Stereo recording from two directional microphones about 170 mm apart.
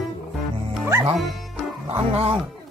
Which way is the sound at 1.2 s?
Centre (ahead or behind).